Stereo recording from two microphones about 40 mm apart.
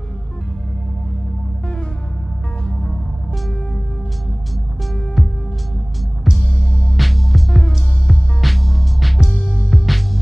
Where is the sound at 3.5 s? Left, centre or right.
Left.